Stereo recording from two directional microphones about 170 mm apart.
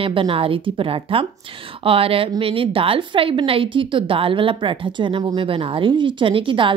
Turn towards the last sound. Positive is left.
turn(degrees=-30)  # may be behind; listen again after turning